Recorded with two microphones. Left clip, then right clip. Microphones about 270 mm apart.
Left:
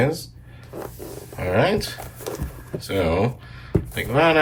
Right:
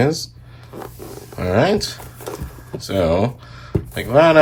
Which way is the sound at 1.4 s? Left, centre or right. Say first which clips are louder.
Right 3 dB; centre.